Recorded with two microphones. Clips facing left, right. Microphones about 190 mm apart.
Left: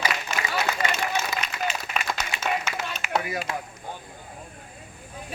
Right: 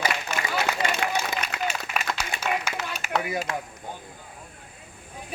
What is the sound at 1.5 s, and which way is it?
Applause, 70° right (ahead or behind).